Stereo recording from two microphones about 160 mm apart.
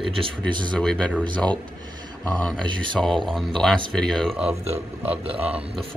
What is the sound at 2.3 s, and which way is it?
Speech, 5° left (ahead or behind).